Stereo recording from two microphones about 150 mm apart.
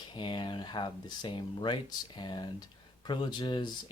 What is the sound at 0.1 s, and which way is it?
Speech, 30° left (ahead or behind).